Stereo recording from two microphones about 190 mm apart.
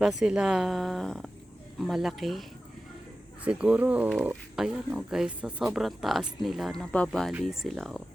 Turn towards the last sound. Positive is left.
turn(degrees=0)  # may be behind; listen again after turning